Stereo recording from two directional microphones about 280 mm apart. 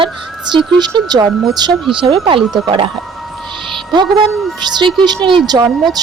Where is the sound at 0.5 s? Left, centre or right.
Centre.